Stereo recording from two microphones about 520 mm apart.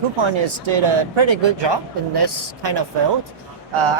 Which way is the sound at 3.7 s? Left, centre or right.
Right.